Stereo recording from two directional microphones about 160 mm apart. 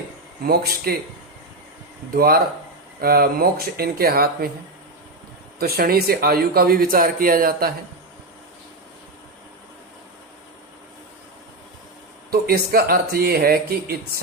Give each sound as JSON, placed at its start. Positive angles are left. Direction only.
{"t": 0.4, "sound": "speech", "side_deg": -75}
{"t": 2.1, "sound": "speech", "side_deg": -70}
{"t": 5.5, "sound": "speech", "side_deg": -75}
{"t": 12.3, "sound": "speech", "side_deg": -70}